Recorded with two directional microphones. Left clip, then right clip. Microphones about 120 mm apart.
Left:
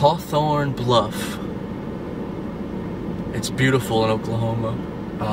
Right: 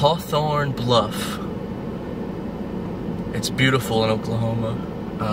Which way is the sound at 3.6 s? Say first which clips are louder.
Even; 5° left (ahead or behind).